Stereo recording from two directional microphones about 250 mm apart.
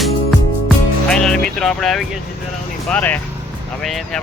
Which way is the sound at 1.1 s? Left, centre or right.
Centre.